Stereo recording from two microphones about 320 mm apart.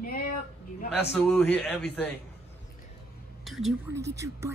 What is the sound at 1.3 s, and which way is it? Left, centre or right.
Speech, centre.